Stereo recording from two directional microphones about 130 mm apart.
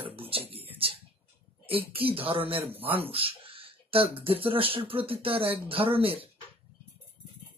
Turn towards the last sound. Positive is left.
turn(degrees=-45)  # may be behind; listen again after turning